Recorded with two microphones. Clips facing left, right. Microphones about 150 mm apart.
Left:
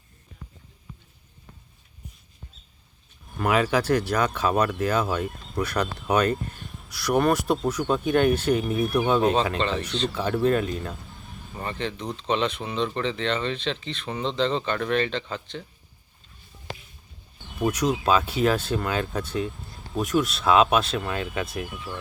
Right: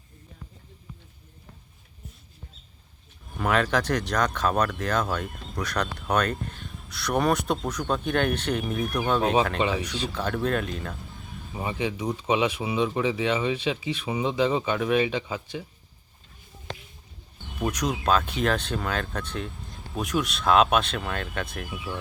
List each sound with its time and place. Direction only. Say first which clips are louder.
3.3 s speech: left 2 dB; 5° left (ahead or behind)
9.6 s speech: right 1 dB; 10° right (ahead or behind)
10.1 s speech: left 5 dB; 5° left (ahead or behind)
11.5 s speech: right 2 dB; 10° right (ahead or behind)
17.6 s speech: left 4 dB; 5° left (ahead or behind)